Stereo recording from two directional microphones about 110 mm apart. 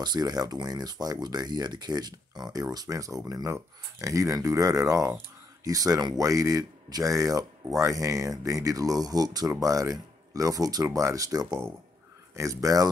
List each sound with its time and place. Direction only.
0.0 s speech: 40° right (ahead or behind)